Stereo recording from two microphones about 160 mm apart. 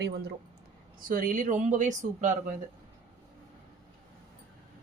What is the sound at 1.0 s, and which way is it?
Speech, 60° right (ahead or behind).